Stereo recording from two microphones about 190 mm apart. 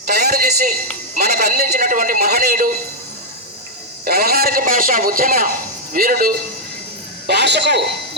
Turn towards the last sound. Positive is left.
turn(degrees=-65)  # may be behind; listen again after turning